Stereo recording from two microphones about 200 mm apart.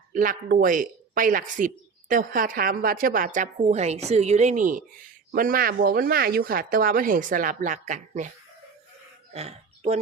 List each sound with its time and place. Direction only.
0.1 s speech: 45° right (ahead or behind)
9.3 s speech: 30° right (ahead or behind)